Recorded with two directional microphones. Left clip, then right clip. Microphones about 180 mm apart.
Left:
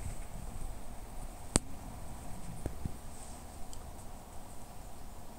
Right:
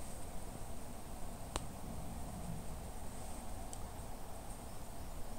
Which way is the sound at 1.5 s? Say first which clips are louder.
Left 10 dB; 35° left (ahead or behind).